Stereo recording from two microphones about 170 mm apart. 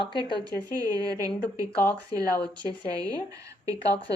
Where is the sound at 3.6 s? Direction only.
20° right (ahead or behind).